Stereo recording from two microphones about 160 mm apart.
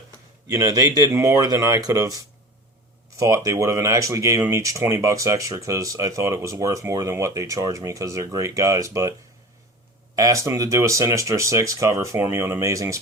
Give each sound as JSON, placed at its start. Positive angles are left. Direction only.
{"t": 0.4, "sound": "speech", "side_deg": -20}
{"t": 10.2, "sound": "speech", "side_deg": -20}